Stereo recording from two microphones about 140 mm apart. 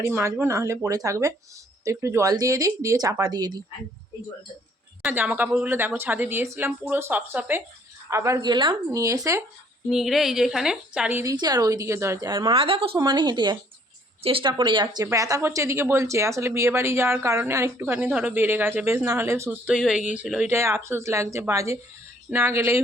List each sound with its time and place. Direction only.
0.0 s speech: 20° right (ahead or behind)
5.0 s a woman's voice: 10° right (ahead or behind)
9.9 s a woman's voice: centre (ahead or behind)
11.2 s speech: 25° right (ahead or behind)
13.0 s speech: 30° right (ahead or behind)
19.6 s a woman's voice: 5° right (ahead or behind)
20.5 s a woman's voice: 20° right (ahead or behind)